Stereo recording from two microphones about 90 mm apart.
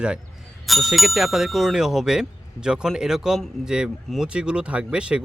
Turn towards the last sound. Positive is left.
turn(degrees=-10)  # may be behind; listen again after turning